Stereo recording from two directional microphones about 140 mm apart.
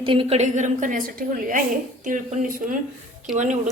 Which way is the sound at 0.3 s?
60° right (ahead or behind).